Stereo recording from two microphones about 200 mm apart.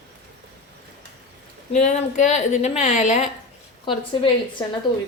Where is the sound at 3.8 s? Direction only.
25° left (ahead or behind).